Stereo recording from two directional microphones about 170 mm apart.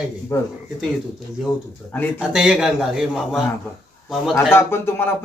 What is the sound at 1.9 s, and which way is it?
Speech, 10° left (ahead or behind).